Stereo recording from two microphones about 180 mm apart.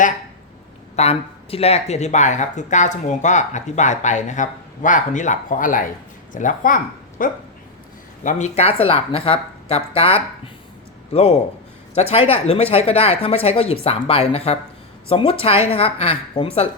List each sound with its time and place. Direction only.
0.9 s speech: 35° left (ahead or behind)